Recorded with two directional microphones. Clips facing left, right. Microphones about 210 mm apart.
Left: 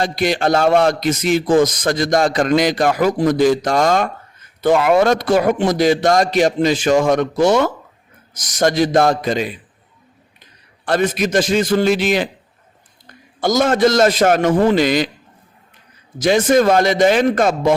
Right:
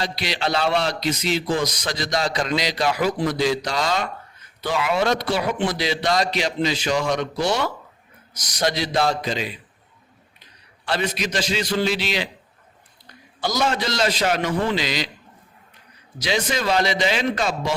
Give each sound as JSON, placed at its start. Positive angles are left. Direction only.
{"t": 0.0, "sound": "a man's voice", "side_deg": 50}
{"t": 10.8, "sound": "a man's voice", "side_deg": 50}
{"t": 13.4, "sound": "a man's voice", "side_deg": 50}
{"t": 16.1, "sound": "a man's voice", "side_deg": 50}